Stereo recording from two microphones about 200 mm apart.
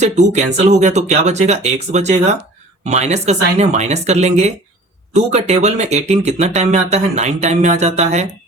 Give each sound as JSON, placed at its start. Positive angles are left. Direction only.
{"t": 0.0, "sound": "speech", "side_deg": -35}